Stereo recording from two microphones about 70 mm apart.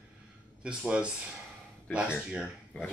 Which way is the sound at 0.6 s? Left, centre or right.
Centre.